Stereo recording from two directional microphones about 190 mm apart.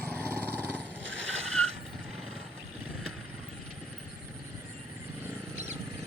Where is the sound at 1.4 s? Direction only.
90° right.